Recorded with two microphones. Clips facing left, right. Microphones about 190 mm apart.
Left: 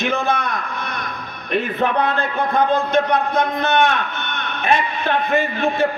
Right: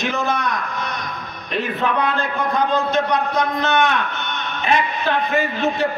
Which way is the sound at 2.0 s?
55° left (ahead or behind).